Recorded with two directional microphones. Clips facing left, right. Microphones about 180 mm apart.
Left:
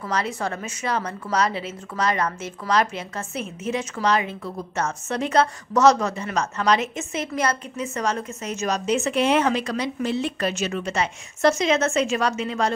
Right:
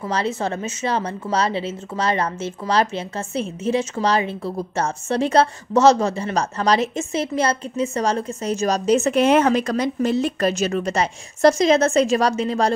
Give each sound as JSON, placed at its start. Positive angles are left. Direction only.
{"t": 0.1, "sound": "a woman's voice", "side_deg": -25}